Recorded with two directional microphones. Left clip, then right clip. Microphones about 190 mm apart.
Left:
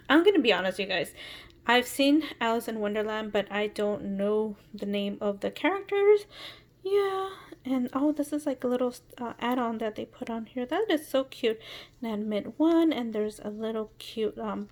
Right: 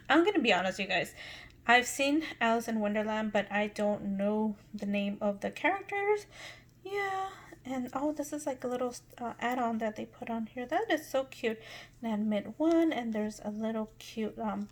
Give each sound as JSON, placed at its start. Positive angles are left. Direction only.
{"t": 0.1, "sound": "a woman's voice", "side_deg": 35}